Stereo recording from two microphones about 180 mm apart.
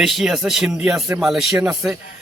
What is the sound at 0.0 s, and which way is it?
A man's voice, centre (ahead or behind).